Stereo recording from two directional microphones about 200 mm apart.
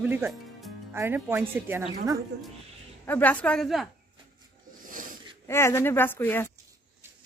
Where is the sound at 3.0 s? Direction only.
10° left (ahead or behind).